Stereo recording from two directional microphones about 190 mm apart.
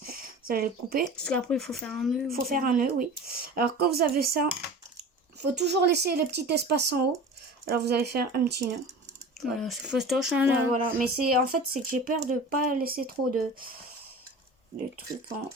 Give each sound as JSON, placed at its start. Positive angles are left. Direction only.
{"t": 0.1, "sound": "a sound", "side_deg": -50}
{"t": 1.1, "sound": "speech", "side_deg": 5}
{"t": 2.3, "sound": "speech", "side_deg": -50}
{"t": 9.6, "sound": "speech", "side_deg": 0}
{"t": 10.8, "sound": "speech", "side_deg": -50}